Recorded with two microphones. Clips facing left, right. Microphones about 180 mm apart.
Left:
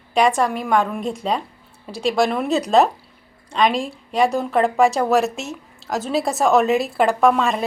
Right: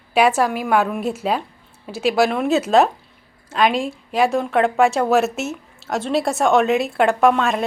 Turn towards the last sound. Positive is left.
turn(degrees=0)  # may be behind; listen again after turning